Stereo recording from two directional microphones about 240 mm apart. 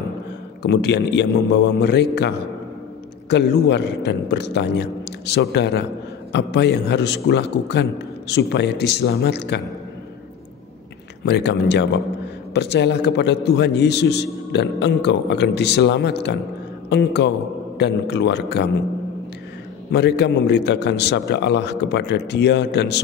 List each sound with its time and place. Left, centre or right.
0.6 s a man's voice: left
11.2 s a man's voice: left
19.9 s a man's voice: left